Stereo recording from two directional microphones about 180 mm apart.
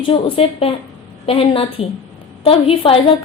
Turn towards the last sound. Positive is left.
turn(degrees=30)  # may be behind; listen again after turning